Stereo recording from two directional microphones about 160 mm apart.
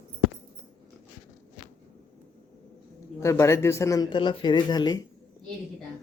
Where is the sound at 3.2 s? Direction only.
20° left (ahead or behind).